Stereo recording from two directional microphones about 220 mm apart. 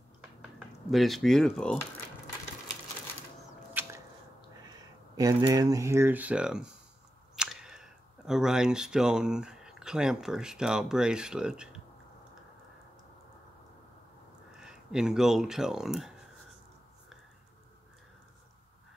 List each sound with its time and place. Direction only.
0.8 s speech: centre (ahead or behind)
3.8 s a sound: 10° right (ahead or behind)
4.6 s speech: 15° right (ahead or behind)
14.6 s speech: 5° right (ahead or behind)